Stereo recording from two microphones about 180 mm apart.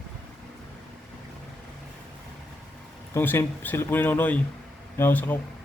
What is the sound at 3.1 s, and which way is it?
A man's voice, 15° left (ahead or behind).